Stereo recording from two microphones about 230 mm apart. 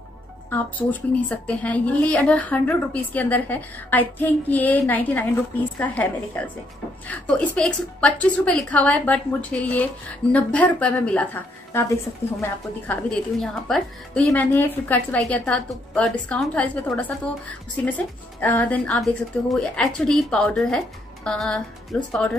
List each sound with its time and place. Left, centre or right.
0.5 s a woman's voice: centre
12.4 s a woman's voice: centre